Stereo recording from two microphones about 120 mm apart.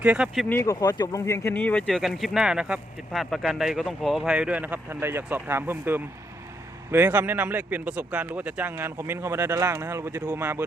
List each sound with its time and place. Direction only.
0.0 s speech: 10° right (ahead or behind)
0.4 s speech: 20° left (ahead or behind)
1.9 s speech: centre (ahead or behind); by 10.7 s 20° right (ahead or behind)